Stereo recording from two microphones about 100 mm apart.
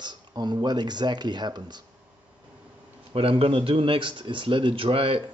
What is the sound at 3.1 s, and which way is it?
Speech, 70° right (ahead or behind).